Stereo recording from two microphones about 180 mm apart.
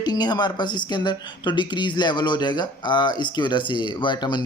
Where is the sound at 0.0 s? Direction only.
25° left (ahead or behind).